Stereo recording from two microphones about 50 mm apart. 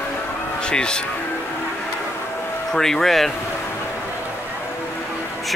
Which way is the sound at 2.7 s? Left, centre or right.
Centre.